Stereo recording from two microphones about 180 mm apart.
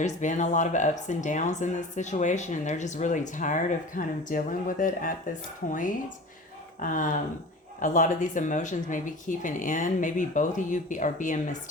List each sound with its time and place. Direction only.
0.0 s speech: 45° left (ahead or behind)
6.8 s speech: 45° left (ahead or behind)